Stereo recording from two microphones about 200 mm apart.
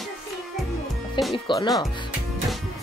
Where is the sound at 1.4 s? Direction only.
20° left (ahead or behind).